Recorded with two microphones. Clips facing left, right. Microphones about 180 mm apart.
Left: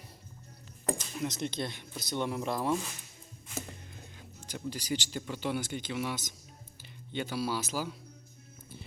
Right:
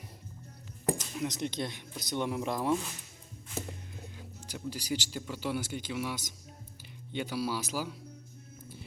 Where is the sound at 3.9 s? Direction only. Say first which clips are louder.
Right 3 dB; 5° right (ahead or behind).